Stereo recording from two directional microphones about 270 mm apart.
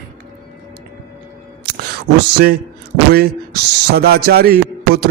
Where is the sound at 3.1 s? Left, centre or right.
Right.